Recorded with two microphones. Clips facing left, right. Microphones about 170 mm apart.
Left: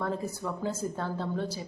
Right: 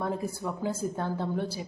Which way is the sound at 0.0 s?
15° right (ahead or behind).